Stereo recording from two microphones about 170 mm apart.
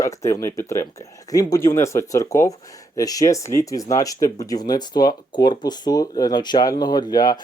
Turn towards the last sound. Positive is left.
turn(degrees=25)  # may be behind; listen again after turning